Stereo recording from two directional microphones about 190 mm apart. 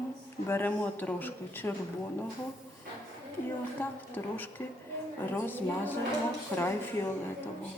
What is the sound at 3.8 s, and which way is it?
Speech, 10° left (ahead or behind).